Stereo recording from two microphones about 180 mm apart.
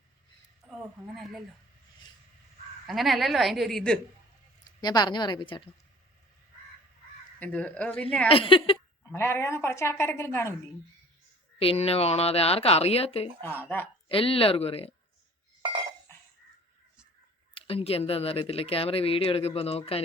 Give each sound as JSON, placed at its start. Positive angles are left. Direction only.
{"t": 0.7, "sound": "speech", "side_deg": 0}
{"t": 2.8, "sound": "a woman's voice", "side_deg": 0}
{"t": 4.6, "sound": "a woman's voice", "side_deg": 25}
{"t": 7.3, "sound": "a woman's voice", "side_deg": 5}
{"t": 8.3, "sound": "a woman's voice", "side_deg": 30}
{"t": 9.1, "sound": "a woman's voice", "side_deg": 15}
{"t": 11.6, "sound": "speech", "side_deg": 30}
{"t": 13.4, "sound": "a woman's voice", "side_deg": 10}
{"t": 14.1, "sound": "speech", "side_deg": 30}
{"t": 17.5, "sound": "speech", "side_deg": 30}